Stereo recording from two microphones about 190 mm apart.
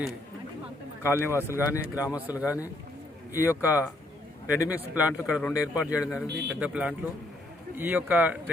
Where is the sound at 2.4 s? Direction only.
15° left (ahead or behind).